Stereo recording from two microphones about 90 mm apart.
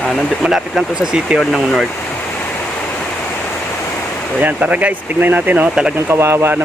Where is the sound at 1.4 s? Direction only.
5° left (ahead or behind).